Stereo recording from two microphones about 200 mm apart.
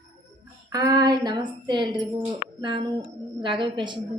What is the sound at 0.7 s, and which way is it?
Speech, 20° right (ahead or behind).